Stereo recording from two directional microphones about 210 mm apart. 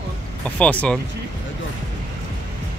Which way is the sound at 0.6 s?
5° left (ahead or behind).